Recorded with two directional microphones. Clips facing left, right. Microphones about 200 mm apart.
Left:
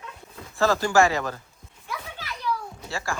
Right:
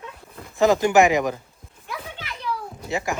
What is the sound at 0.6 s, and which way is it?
Speech, 20° right (ahead or behind).